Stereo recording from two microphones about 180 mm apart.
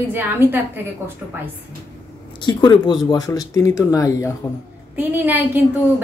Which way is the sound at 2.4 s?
25° left (ahead or behind).